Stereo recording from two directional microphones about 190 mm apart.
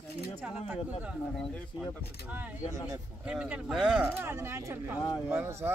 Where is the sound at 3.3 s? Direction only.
5° right (ahead or behind).